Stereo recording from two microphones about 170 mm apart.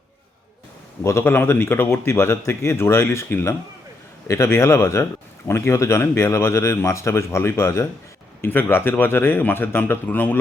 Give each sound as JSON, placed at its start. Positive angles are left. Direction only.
{"t": 1.0, "sound": "a man's voice", "side_deg": 15}